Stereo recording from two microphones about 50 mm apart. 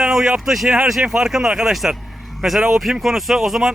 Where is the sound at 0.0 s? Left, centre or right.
Centre.